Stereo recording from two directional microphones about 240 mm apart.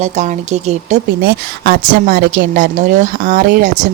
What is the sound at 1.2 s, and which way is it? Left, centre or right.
A woman's voice, right.